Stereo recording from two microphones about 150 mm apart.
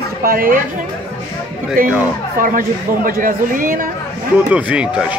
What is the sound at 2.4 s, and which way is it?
Speech, 70° right (ahead or behind).